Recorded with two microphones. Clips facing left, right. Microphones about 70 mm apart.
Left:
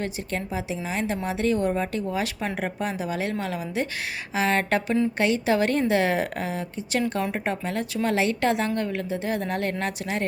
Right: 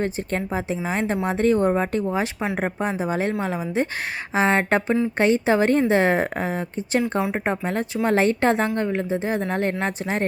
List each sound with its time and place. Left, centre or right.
0.0 s a woman's voice: right